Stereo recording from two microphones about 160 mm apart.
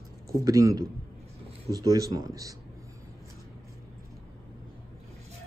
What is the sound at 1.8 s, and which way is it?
Speech, 20° right (ahead or behind).